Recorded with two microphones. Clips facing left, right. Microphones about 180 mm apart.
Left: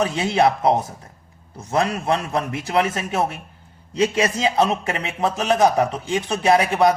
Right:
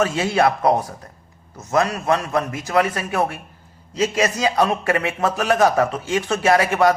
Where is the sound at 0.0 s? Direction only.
20° left (ahead or behind).